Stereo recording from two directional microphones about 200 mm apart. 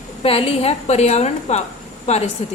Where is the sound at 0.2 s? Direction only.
30° left (ahead or behind).